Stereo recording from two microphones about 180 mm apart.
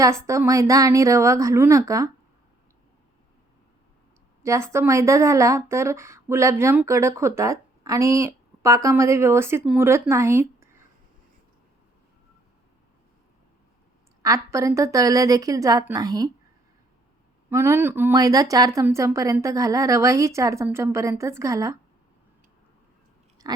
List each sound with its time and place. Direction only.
0.3 s speech: 15° right (ahead or behind)
4.4 s speech: 15° right (ahead or behind)
14.2 s a woman's voice: 20° right (ahead or behind)
17.5 s speech: 15° right (ahead or behind)
23.4 s chewing: 20° right (ahead or behind)